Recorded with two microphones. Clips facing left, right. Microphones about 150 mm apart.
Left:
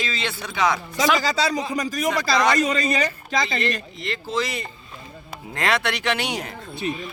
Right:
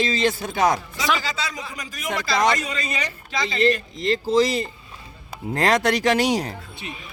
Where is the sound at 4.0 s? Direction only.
35° right (ahead or behind).